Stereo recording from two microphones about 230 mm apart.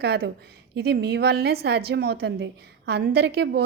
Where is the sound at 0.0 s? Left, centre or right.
Right.